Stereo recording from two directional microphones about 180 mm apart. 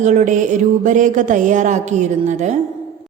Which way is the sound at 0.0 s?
40° right (ahead or behind).